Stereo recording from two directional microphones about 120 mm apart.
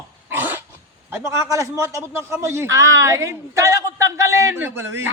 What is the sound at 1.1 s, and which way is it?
Speech, 25° right (ahead or behind).